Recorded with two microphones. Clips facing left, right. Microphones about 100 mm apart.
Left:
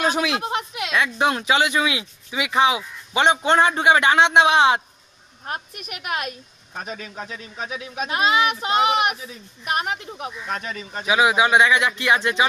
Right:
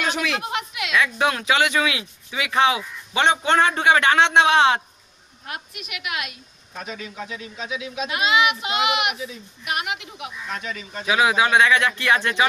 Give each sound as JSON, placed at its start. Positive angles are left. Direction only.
{"t": 0.0, "sound": "a sound", "side_deg": 35}
{"t": 0.4, "sound": "speech", "side_deg": 35}
{"t": 5.4, "sound": "a woman's voice", "side_deg": 40}
{"t": 11.1, "sound": "speech", "side_deg": 20}